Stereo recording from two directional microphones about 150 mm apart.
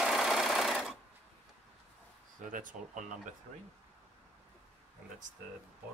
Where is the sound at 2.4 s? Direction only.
60° right (ahead or behind).